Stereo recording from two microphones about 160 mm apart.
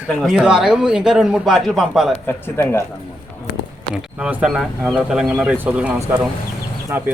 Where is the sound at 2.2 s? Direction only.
15° left (ahead or behind).